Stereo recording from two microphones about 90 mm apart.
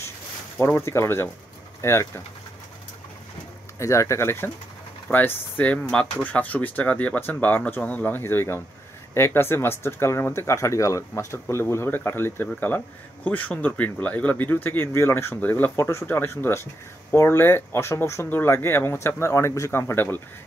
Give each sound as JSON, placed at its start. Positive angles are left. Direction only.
{"t": 0.6, "sound": "speech", "side_deg": 30}
{"t": 3.8, "sound": "speech", "side_deg": 35}
{"t": 5.1, "sound": "speech", "side_deg": 20}